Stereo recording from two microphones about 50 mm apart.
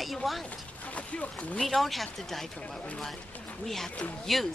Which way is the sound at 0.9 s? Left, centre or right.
Left.